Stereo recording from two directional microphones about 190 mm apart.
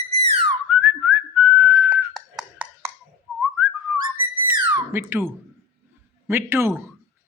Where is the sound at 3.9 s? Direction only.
10° right (ahead or behind).